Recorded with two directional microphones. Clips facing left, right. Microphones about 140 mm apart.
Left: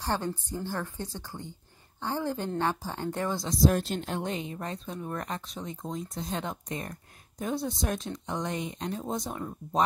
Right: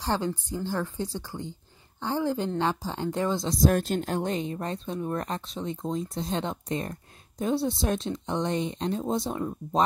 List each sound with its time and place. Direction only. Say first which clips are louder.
0.0 s speech: right 3 dB; 15° right (ahead or behind)
3.6 s speech: right 1 dB; 50° right (ahead or behind); by 9.4 s 25° right (ahead or behind)